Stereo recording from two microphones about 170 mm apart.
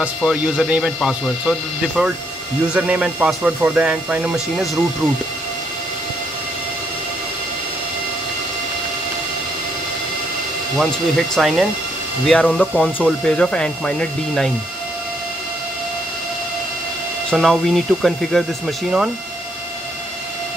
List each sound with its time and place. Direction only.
0.0 s speech: 5° right (ahead or behind)
10.8 s speech: centre (ahead or behind)
17.3 s speech: centre (ahead or behind)